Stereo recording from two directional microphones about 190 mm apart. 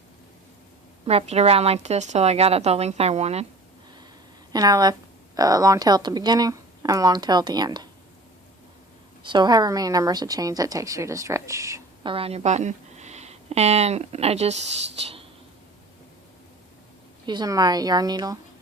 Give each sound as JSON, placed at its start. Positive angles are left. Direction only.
{"t": 1.0, "sound": "a woman's voice", "side_deg": -35}
{"t": 4.5, "sound": "a woman's voice", "side_deg": -20}
{"t": 9.2, "sound": "a woman's voice", "side_deg": -25}
{"t": 12.1, "sound": "speech", "side_deg": -30}
{"t": 17.2, "sound": "a woman's voice", "side_deg": -20}